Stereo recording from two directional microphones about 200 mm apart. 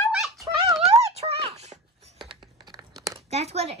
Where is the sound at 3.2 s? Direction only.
30° right (ahead or behind).